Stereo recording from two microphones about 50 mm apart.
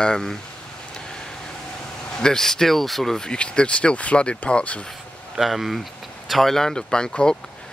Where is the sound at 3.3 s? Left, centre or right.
Left.